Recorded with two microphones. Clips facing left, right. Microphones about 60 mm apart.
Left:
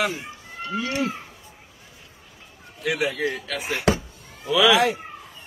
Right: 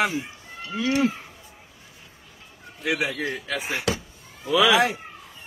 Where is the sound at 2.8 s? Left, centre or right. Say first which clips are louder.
Left 2 dB; right.